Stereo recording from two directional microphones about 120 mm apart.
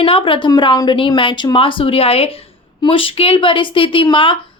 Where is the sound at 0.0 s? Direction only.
50° left (ahead or behind).